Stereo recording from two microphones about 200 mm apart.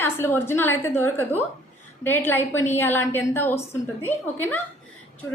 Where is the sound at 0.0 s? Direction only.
10° left (ahead or behind).